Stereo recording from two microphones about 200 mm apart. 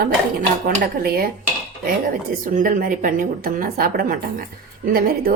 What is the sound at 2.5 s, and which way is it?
A woman's voice, 45° right (ahead or behind).